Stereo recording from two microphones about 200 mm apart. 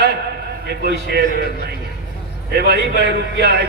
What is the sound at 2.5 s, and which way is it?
A man's voice, 55° right (ahead or behind).